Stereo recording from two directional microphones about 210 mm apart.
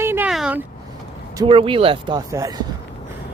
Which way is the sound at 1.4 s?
25° right (ahead or behind).